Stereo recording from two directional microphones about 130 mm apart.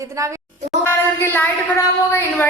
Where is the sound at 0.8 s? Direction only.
15° left (ahead or behind).